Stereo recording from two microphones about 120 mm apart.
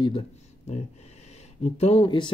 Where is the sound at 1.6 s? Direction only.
60° left (ahead or behind); by 2.3 s 45° left (ahead or behind).